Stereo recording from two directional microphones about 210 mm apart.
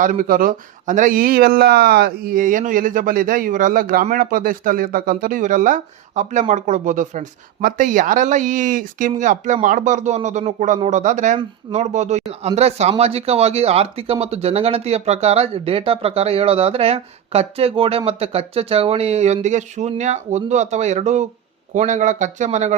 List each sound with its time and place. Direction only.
0.0 s speech: 40° right (ahead or behind)